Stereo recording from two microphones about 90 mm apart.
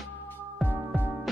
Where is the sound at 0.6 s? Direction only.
20° right (ahead or behind).